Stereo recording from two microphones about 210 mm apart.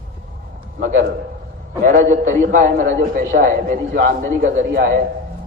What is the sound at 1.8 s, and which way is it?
A man's voice, 35° right (ahead or behind).